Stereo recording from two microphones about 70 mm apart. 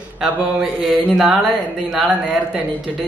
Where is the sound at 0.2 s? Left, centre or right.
Centre.